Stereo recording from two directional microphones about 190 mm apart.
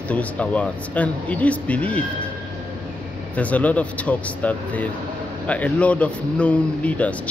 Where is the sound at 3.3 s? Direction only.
5° left (ahead or behind).